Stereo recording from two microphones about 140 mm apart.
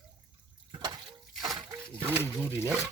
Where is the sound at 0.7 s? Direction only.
30° right (ahead or behind).